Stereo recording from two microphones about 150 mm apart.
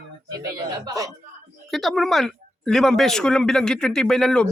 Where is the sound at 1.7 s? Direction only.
Centre (ahead or behind).